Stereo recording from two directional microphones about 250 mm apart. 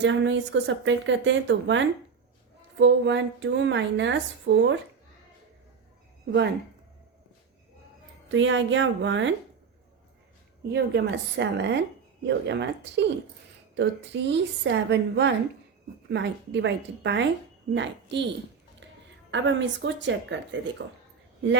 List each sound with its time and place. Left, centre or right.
0.0 s a woman's voice: right
8.3 s a woman's voice: right
10.7 s a woman's voice: right
19.3 s a woman's voice: right